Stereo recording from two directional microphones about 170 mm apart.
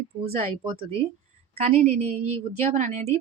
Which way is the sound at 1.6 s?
40° right (ahead or behind).